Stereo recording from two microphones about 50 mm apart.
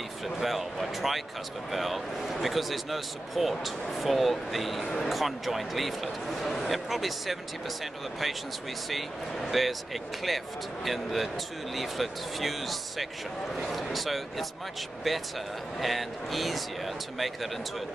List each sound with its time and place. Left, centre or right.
0.4 s a man's voice: centre